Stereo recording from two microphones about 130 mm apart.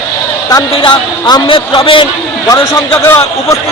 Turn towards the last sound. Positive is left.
turn(degrees=20)  # may be behind; listen again after turning